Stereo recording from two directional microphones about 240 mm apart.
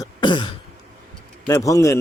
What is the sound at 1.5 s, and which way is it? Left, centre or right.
Speech, centre.